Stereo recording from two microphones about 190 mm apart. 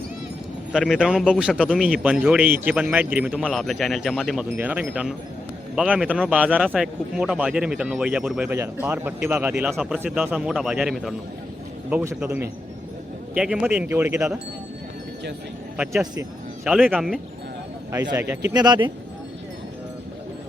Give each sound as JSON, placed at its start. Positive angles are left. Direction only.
{"t": 0.7, "sound": "a man's voice", "side_deg": -5}
{"t": 15.8, "sound": "a man's voice", "side_deg": -5}